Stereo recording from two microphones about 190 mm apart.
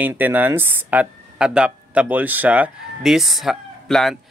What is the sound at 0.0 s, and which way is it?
Speech, 10° right (ahead or behind).